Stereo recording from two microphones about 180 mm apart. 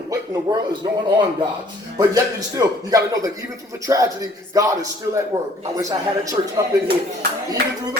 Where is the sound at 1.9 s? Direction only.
20° right (ahead or behind).